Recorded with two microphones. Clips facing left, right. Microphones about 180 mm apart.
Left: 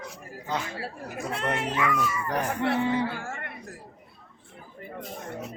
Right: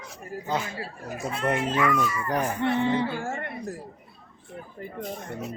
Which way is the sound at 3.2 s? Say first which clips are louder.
Right 5 dB; 35° right (ahead or behind).